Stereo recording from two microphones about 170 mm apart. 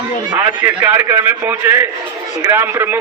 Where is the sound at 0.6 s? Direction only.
10° right (ahead or behind).